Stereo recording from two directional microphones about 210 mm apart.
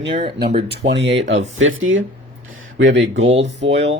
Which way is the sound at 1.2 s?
65° right (ahead or behind).